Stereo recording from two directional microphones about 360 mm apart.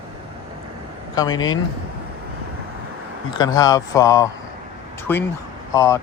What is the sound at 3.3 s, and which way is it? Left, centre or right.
Speech, centre.